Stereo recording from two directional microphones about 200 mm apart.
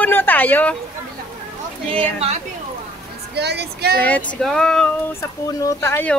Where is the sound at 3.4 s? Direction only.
55° right (ahead or behind).